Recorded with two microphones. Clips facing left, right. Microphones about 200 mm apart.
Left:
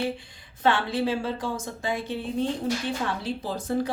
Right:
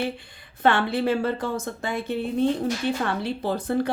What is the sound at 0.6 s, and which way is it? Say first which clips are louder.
Speech: right 2 dB; 60° right (ahead or behind).